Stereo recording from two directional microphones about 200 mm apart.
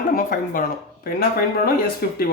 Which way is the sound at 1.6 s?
50° left (ahead or behind).